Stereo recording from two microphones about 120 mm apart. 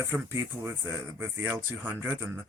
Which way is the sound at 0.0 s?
20° right (ahead or behind).